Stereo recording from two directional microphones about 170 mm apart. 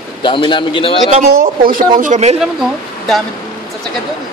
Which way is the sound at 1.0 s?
45° right (ahead or behind).